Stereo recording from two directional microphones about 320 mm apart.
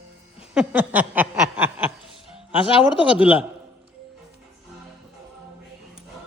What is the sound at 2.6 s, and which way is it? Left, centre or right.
Speech, centre.